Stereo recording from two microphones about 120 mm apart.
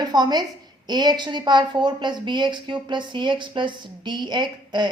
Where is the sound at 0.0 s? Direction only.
35° right (ahead or behind).